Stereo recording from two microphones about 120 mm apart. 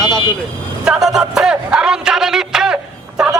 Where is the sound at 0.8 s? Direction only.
5° right (ahead or behind).